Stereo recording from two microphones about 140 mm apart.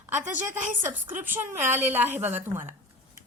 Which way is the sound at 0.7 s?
15° right (ahead or behind).